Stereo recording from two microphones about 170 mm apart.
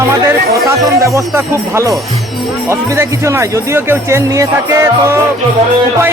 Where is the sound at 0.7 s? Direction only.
20° right (ahead or behind).